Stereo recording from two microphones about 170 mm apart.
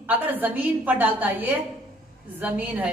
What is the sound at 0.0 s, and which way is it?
A woman's voice, 10° right (ahead or behind).